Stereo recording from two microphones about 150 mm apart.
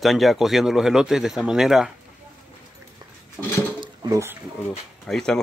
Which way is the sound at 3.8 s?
20° right (ahead or behind).